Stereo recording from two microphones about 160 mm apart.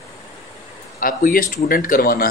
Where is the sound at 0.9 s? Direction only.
60° left (ahead or behind).